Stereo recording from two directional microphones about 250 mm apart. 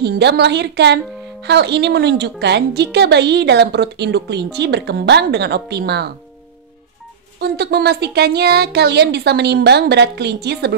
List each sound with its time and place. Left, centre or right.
0.0 s speech: right
7.3 s speech: right